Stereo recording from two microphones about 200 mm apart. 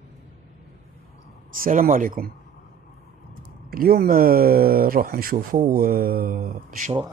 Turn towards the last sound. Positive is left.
turn(degrees=-45)  # may be behind; listen again after turning